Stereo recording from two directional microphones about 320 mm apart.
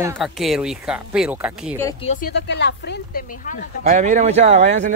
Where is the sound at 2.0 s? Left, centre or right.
Left.